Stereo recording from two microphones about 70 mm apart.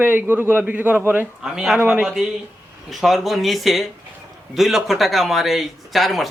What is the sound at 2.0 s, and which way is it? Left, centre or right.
Speech, centre.